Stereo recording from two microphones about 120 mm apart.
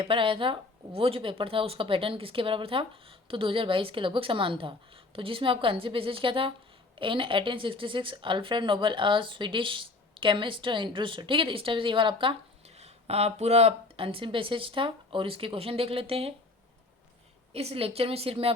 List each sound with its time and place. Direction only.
0.0 s speech: 45° right (ahead or behind)
12.6 s speech: 65° right (ahead or behind)
17.5 s speech: 55° right (ahead or behind)